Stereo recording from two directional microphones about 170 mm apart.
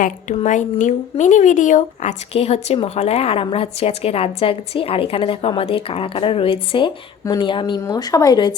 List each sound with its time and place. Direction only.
0.0 s a woman's voice: 45° left (ahead or behind); by 8.5 s 25° left (ahead or behind)